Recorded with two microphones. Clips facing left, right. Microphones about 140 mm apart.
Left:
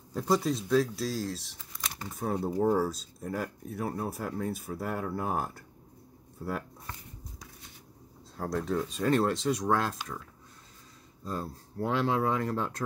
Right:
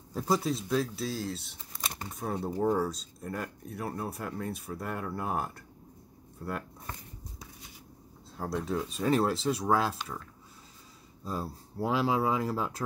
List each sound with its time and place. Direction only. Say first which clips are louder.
0.1 s speech: left 1 dB; 5° right (ahead or behind)
8.4 s speech: left 2 dB; 5° right (ahead or behind)
11.2 s speech: even; 10° right (ahead or behind)